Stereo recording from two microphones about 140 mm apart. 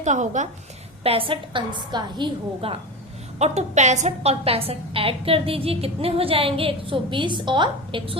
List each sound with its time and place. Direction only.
0.0 s a woman's voice: 60° right (ahead or behind)
1.0 s a woman's voice: 40° right (ahead or behind)
3.3 s a woman's voice: 55° right (ahead or behind); by 8.1 s 35° right (ahead or behind)